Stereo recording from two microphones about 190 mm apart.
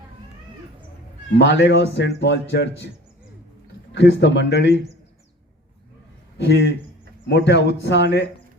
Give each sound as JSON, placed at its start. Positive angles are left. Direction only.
{"t": 1.4, "sound": "speech", "side_deg": 70}
{"t": 3.9, "sound": "speech", "side_deg": 65}
{"t": 6.3, "sound": "a man's voice", "side_deg": 65}